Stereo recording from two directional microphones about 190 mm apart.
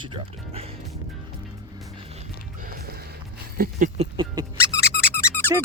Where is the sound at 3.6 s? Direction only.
40° right (ahead or behind).